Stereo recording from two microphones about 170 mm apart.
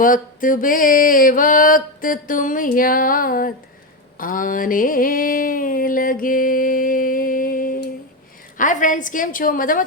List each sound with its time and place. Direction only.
0.0 s mantra: 55° left (ahead or behind)
4.2 s a sound: 55° left (ahead or behind)
8.5 s mantra: 50° left (ahead or behind)